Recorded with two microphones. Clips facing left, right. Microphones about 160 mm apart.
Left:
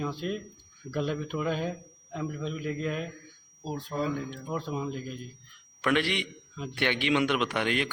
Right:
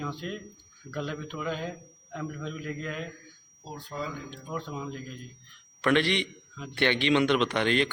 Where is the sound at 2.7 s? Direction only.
30° left (ahead or behind).